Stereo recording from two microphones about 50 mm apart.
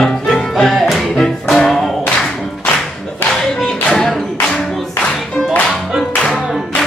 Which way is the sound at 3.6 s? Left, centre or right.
Centre.